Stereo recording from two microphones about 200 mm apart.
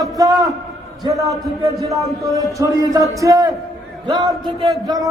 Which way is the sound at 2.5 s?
15° right (ahead or behind).